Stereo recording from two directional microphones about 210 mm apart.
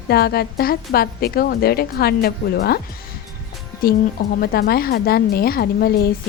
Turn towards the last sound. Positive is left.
turn(degrees=45)  # may be behind; listen again after turning